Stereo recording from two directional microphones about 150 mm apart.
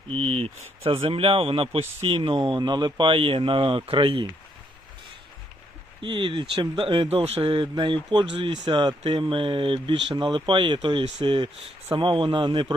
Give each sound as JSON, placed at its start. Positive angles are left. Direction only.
{"t": 0.1, "sound": "speech", "side_deg": -40}
{"t": 6.0, "sound": "speech", "side_deg": -35}